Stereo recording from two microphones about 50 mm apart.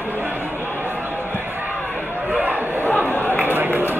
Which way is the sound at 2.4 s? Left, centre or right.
Right.